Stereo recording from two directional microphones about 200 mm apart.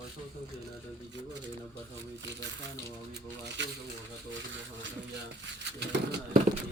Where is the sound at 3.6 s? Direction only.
60° right (ahead or behind).